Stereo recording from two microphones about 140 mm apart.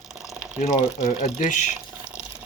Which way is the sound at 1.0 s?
65° left (ahead or behind).